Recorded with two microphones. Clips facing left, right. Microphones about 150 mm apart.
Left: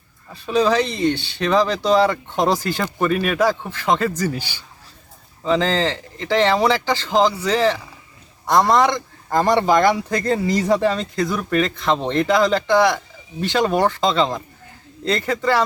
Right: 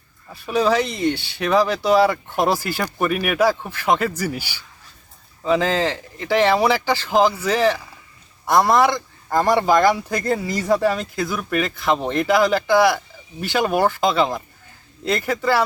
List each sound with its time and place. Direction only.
0.4 s speech: 10° right (ahead or behind)
10.4 s speech: 25° left (ahead or behind)
10.7 s speech: 5° right (ahead or behind)